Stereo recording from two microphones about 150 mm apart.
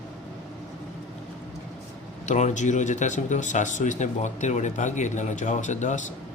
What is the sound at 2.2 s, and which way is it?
Speech, 50° left (ahead or behind).